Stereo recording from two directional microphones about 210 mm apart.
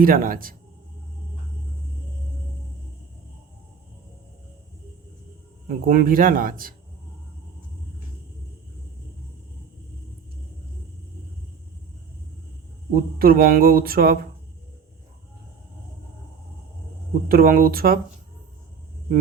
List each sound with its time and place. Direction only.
0.0 s speech: 45° right (ahead or behind)
5.6 s speech: 45° right (ahead or behind)
12.9 s speech: 45° right (ahead or behind)
17.2 s speech: 45° right (ahead or behind)